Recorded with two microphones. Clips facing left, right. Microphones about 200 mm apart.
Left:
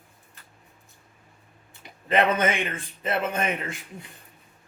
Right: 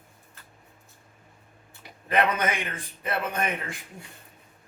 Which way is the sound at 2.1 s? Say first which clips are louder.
Left 3 dB; 25° left (ahead or behind).